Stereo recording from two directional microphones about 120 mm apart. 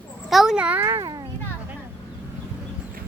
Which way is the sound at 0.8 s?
30° right (ahead or behind).